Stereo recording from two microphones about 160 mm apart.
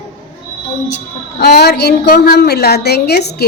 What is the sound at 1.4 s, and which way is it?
A woman's voice, 85° left.